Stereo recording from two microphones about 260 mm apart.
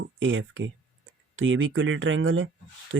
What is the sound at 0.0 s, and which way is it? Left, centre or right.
Speech, right.